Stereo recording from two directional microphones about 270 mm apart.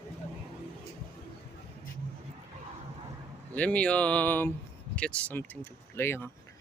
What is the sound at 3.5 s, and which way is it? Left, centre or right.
Speech, centre.